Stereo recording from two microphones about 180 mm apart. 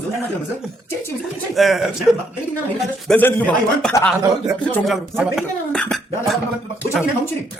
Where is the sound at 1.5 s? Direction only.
Centre (ahead or behind).